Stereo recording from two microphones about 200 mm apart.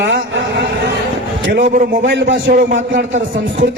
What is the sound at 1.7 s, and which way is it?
Speech, 40° right (ahead or behind).